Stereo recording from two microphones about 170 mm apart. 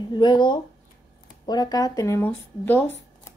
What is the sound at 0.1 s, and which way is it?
Speech, 25° left (ahead or behind).